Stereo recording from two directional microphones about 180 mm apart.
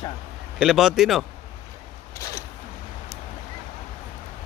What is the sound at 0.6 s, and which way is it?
Speech, 5° right (ahead or behind).